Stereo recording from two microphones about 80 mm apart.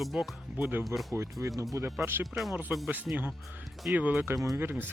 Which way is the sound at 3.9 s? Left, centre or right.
Right.